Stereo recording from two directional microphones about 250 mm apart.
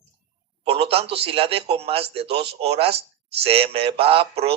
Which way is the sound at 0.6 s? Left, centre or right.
Right.